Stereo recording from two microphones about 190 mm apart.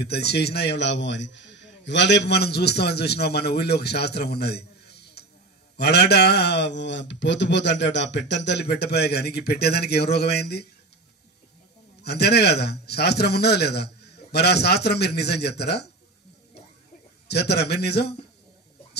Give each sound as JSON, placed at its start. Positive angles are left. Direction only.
{"t": 0.0, "sound": "speech", "side_deg": 60}
{"t": 12.0, "sound": "speech", "side_deg": 60}
{"t": 17.3, "sound": "speech", "side_deg": 60}